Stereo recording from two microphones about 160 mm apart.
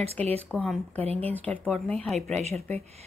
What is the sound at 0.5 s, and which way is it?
Speech, 5° left (ahead or behind).